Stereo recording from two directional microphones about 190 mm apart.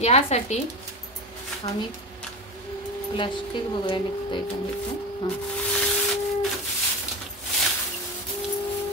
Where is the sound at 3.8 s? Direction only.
25° left (ahead or behind).